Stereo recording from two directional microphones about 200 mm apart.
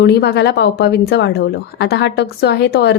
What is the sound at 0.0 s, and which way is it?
Speech, 55° left (ahead or behind).